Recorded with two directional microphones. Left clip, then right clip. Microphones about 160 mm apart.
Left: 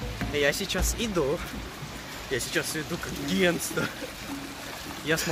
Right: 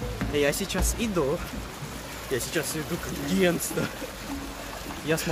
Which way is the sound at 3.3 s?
5° right (ahead or behind).